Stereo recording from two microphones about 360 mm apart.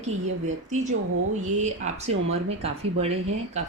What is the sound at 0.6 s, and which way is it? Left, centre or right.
A woman's voice, centre.